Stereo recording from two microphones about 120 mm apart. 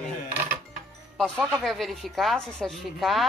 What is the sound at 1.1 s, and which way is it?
A woman's voice, 5° left (ahead or behind).